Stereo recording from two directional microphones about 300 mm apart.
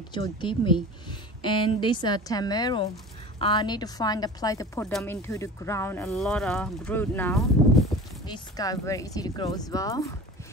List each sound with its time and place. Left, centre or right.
0.1 s speech: centre